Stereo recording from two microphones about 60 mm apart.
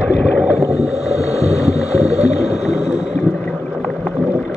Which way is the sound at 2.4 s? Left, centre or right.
Centre.